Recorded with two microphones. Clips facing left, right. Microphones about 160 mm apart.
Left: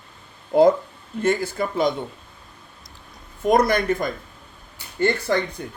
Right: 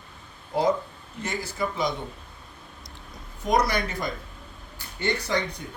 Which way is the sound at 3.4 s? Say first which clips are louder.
Left 6 dB; 50° left (ahead or behind).